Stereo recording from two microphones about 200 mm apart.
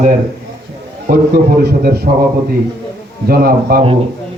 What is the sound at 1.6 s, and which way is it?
Speech, 50° right (ahead or behind).